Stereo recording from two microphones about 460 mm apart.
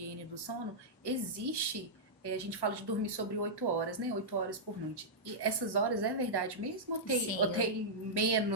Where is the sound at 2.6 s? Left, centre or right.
Right.